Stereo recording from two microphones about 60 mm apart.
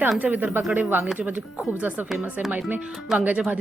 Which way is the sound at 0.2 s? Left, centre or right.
Right.